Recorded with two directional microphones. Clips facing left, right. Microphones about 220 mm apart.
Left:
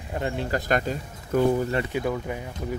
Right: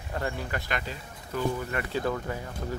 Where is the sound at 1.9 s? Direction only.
15° left (ahead or behind).